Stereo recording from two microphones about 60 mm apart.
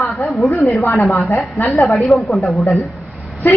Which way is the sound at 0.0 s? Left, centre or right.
Centre.